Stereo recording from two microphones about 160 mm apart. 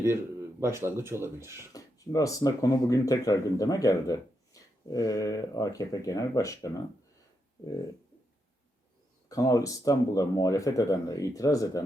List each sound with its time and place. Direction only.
0.6 s speech: 15° right (ahead or behind)
1.7 s speech: 20° left (ahead or behind)
9.3 s speech: 20° left (ahead or behind)